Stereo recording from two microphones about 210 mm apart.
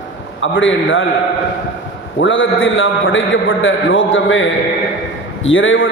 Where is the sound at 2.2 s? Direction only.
65° left (ahead or behind).